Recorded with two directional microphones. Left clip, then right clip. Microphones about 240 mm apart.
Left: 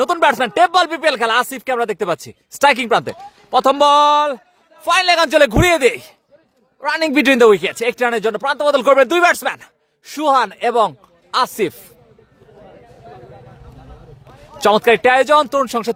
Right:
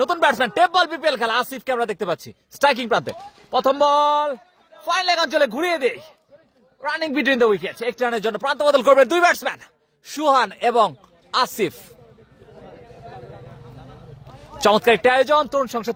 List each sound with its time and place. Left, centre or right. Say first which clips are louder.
0.0 s a man's voice: left 4 dB; left
14.6 s speech: left 3 dB; centre